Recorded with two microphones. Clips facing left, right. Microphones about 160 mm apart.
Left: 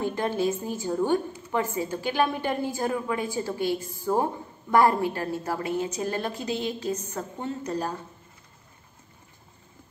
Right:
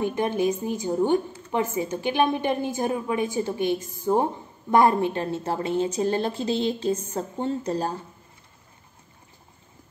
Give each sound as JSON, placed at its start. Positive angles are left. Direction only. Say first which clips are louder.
{"t": 0.0, "sound": "a woman's voice", "louder": "right 2 dB", "side_deg": -20}